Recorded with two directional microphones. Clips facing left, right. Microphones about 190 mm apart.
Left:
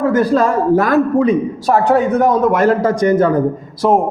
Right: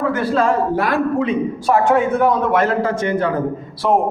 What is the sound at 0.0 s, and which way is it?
A man's voice, 40° left (ahead or behind).